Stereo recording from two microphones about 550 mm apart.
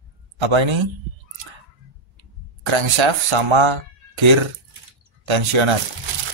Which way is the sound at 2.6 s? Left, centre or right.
Right.